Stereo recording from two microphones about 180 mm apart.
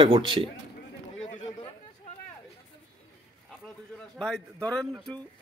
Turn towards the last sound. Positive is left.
turn(degrees=5)  # may be behind; listen again after turning